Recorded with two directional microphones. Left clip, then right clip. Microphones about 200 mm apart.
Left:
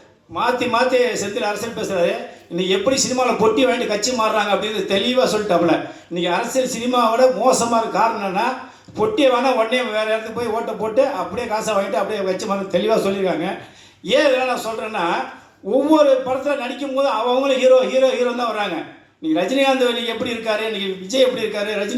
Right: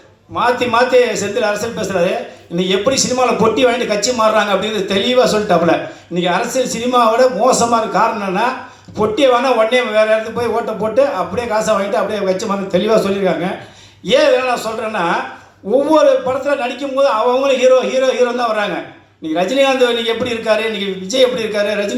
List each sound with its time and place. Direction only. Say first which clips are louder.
0.3 s a man's voice: right 5 dB; 25° right (ahead or behind)